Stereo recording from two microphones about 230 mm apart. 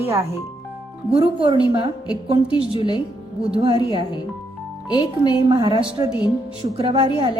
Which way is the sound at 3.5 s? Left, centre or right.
Right.